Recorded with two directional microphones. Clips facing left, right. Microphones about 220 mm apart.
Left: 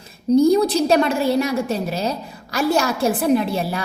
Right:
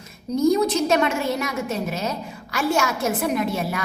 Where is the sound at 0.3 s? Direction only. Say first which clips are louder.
Left 4 dB; 35° left (ahead or behind).